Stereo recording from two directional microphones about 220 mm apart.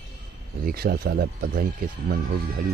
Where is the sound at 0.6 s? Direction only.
45° right (ahead or behind).